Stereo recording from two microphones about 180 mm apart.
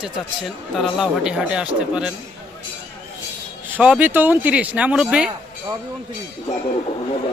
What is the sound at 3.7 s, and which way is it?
Speech, 10° right (ahead or behind).